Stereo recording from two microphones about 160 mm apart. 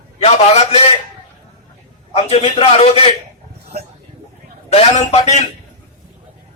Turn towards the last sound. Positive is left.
turn(degrees=40)  # may be behind; listen again after turning